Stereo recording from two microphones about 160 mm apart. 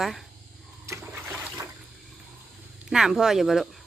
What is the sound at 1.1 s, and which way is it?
Water, 5° right (ahead or behind).